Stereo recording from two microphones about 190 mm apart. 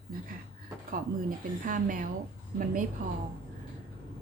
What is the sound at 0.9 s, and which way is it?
A woman's voice, 45° right (ahead or behind).